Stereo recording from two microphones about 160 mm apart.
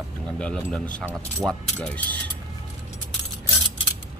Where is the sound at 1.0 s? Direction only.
10° right (ahead or behind).